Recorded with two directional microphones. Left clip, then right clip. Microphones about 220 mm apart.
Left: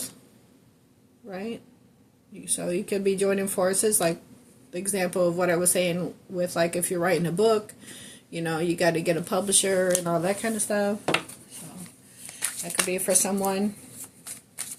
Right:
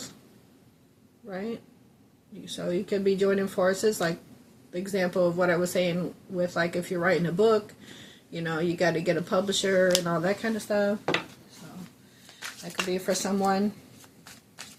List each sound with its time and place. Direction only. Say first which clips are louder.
2.4 s speech: left 1 dB; 45° left (ahead or behind)
12.4 s speech: left 3 dB; 40° left (ahead or behind)